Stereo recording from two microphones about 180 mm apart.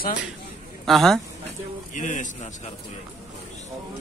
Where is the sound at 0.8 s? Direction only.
Centre (ahead or behind).